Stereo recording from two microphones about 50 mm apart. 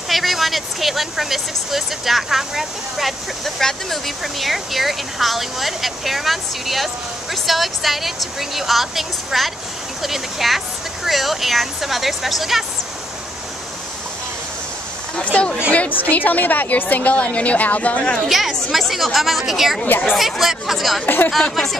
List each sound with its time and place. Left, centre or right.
0.1 s speech: centre
15.7 s a woman's voice: left
18.3 s speech: centre
21.0 s speech: left
21.4 s speech: centre